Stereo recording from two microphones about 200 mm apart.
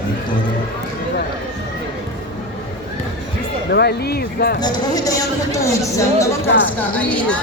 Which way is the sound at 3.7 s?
55° left (ahead or behind).